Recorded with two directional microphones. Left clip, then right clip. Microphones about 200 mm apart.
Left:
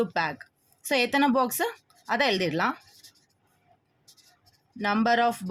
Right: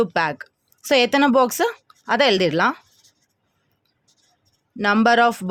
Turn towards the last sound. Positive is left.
turn(degrees=-55)  # may be behind; listen again after turning